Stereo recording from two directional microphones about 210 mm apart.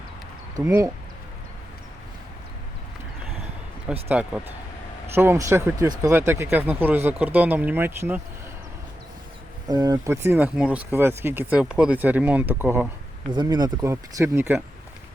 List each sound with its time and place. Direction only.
0.5 s speech: 15° right (ahead or behind)
3.9 s speech: 5° right (ahead or behind)
5.1 s speech: 10° right (ahead or behind)
9.6 s speech: 20° right (ahead or behind)
13.3 s speech: 20° right (ahead or behind)